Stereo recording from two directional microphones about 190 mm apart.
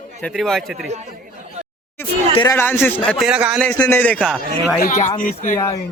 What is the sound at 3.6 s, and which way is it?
Speech, 10° left (ahead or behind).